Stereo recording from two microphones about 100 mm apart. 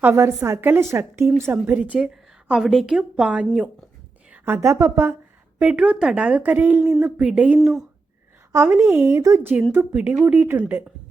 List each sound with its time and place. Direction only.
0.0 s a woman's voice: 25° right (ahead or behind)
1.5 s a woman's voice: 15° right (ahead or behind)
4.3 s a woman's voice: 20° right (ahead or behind)
5.5 s a woman's voice: 10° right (ahead or behind)
7.0 s a woman's voice: 10° right (ahead or behind)
8.5 s a woman's voice: 25° right (ahead or behind)
9.7 s a woman's voice: 15° right (ahead or behind)